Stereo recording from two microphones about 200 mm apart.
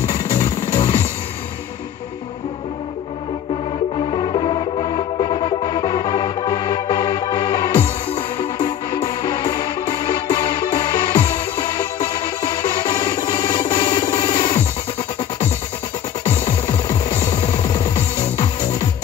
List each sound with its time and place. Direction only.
0.1 s music: 25° left (ahead or behind)
4.1 s music: 25° left (ahead or behind)
16.3 s music: 30° left (ahead or behind)